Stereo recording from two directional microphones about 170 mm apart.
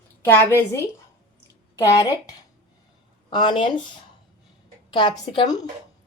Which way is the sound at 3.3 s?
30° left (ahead or behind).